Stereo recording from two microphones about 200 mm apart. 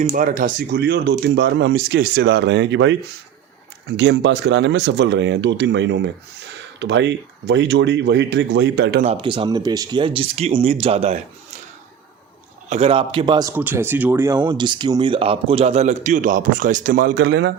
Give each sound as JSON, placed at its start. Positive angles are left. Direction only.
{"t": 0.0, "sound": "speech", "side_deg": -40}
{"t": 9.0, "sound": "speech", "side_deg": -25}
{"t": 12.6, "sound": "speech", "side_deg": -35}
{"t": 13.5, "sound": "speech", "side_deg": -10}